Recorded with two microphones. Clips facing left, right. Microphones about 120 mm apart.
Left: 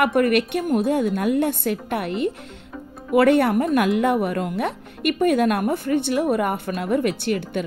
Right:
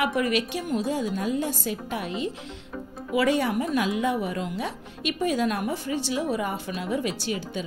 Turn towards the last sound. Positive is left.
turn(degrees=60)  # may be behind; listen again after turning